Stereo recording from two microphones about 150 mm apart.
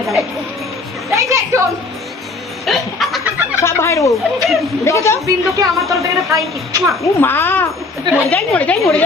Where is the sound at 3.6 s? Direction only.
20° left (ahead or behind).